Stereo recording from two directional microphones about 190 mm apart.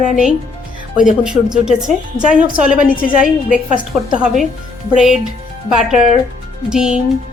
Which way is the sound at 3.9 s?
Centre (ahead or behind).